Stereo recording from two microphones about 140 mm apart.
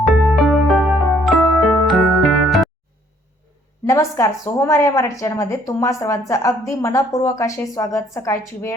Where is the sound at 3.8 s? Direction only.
20° left (ahead or behind).